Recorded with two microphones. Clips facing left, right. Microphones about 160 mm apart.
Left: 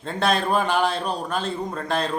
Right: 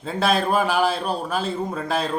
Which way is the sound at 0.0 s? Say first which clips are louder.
Right 1 dB; 5° right (ahead or behind).